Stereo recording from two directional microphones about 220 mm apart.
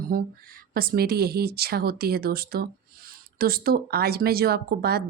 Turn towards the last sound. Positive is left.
turn(degrees=-45)  # may be behind; listen again after turning